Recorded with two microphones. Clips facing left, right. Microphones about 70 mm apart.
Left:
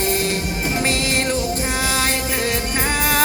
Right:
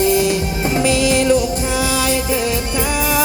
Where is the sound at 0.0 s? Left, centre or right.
Left.